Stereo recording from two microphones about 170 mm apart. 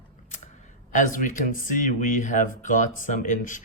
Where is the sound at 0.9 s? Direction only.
50° left (ahead or behind).